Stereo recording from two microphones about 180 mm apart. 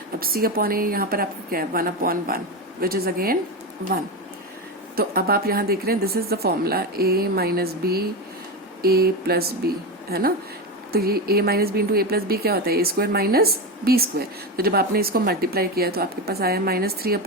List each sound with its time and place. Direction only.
0.2 s a woman's voice: 55° right (ahead or behind)
4.9 s a woman's voice: 55° right (ahead or behind)